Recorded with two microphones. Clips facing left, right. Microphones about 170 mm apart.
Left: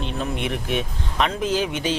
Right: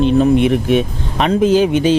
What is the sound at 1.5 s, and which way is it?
Speech, 25° right (ahead or behind).